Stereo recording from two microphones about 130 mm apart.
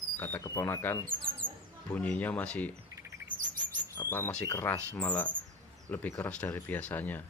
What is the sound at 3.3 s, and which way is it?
Chirp, 40° right (ahead or behind).